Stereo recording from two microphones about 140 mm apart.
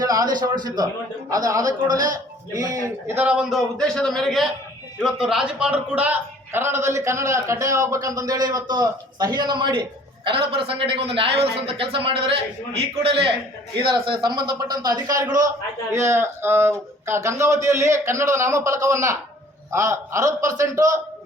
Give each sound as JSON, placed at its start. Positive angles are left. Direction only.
{"t": 0.0, "sound": "a man's voice", "side_deg": -25}
{"t": 3.8, "sound": "a man's voice", "side_deg": 5}